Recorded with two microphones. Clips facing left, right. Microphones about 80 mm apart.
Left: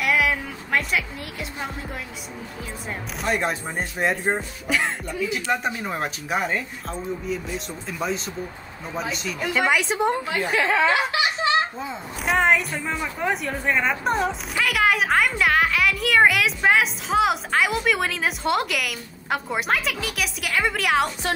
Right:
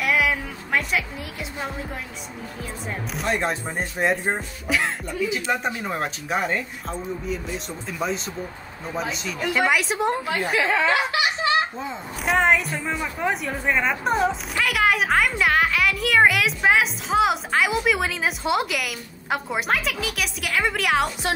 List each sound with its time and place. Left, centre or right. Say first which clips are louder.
0.0 s music: even; centre
3.2 s a woman's voice: even; centre
10.9 s laughter: even; left
11.8 s a woman's voice: even; centre